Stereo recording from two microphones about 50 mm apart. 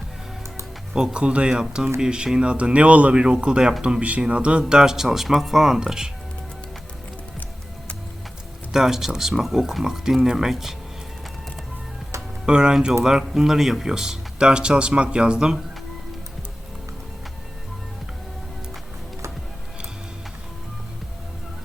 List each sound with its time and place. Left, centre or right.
0.9 s speech: centre
1.2 s speech: right
8.7 s speech: centre
12.5 s speech: centre